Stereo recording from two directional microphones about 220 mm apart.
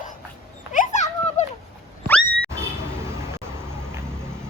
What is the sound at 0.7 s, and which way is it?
Children playing, 35° left (ahead or behind).